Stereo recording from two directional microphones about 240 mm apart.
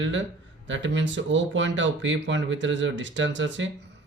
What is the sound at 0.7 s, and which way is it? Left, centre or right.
Speech, right.